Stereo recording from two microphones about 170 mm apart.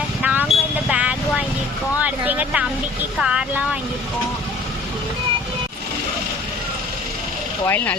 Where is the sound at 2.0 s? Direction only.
10° right (ahead or behind).